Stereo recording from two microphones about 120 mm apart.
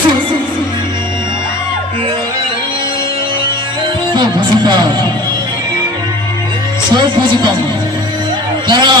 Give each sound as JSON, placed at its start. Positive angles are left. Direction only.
{"t": 4.1, "sound": "music", "side_deg": -40}
{"t": 6.9, "sound": "speech", "side_deg": -40}
{"t": 8.6, "sound": "a man's voice", "side_deg": -40}